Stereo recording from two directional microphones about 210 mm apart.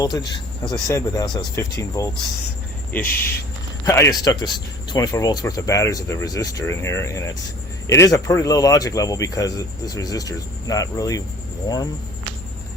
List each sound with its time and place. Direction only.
0.0 s speech: 20° left (ahead or behind)
3.1 s speech: 10° left (ahead or behind)